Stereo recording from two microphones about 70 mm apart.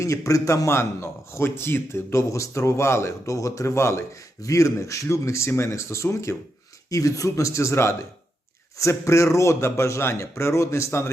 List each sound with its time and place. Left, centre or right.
0.0 s a man's voice: left
6.9 s a man's voice: left